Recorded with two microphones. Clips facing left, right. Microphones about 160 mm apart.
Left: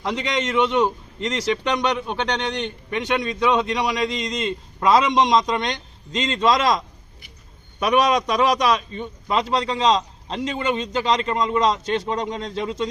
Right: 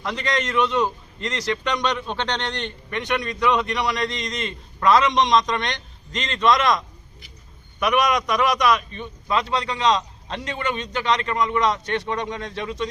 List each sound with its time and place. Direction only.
0.0 s a man's voice: 25° left (ahead or behind)
2.0 s a man's voice: 10° left (ahead or behind)